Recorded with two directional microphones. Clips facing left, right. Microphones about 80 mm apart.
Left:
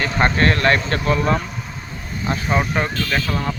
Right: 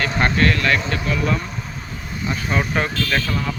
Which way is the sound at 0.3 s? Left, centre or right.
Left.